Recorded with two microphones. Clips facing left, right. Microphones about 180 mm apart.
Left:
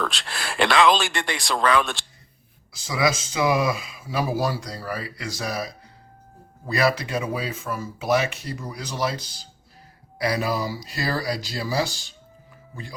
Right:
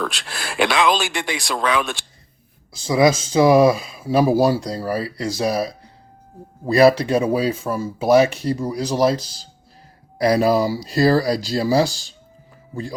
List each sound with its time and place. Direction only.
0.0 s speech: centre (ahead or behind)
2.8 s speech: 35° right (ahead or behind)